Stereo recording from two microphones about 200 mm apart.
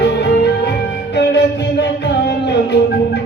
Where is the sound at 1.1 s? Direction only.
60° left (ahead or behind).